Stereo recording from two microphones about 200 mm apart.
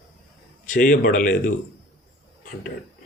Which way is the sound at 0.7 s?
40° left (ahead or behind).